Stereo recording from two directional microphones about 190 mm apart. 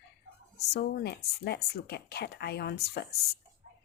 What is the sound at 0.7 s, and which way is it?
Speech, 60° left (ahead or behind).